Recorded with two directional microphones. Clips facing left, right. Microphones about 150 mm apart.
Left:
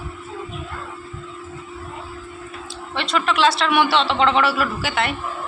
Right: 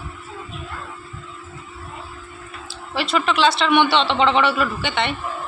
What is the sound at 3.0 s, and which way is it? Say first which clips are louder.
A man's voice: right 1 dB; centre (ahead or behind).